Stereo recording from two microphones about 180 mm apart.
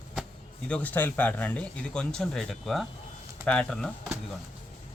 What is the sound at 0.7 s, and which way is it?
Speech, 10° left (ahead or behind).